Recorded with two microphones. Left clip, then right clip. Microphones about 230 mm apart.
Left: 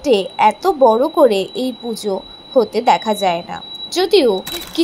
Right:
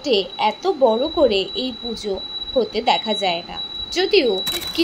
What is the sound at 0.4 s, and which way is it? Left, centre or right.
Speech, centre.